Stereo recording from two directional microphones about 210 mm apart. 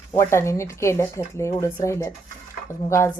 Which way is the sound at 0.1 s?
15° left (ahead or behind).